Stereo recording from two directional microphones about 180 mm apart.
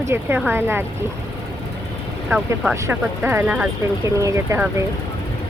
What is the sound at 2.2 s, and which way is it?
Speech, 5° right (ahead or behind).